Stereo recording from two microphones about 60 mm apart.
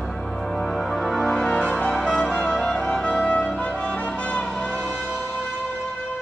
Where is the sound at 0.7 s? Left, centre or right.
Centre.